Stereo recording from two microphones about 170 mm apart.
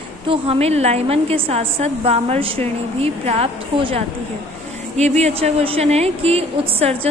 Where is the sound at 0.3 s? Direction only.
35° right (ahead or behind).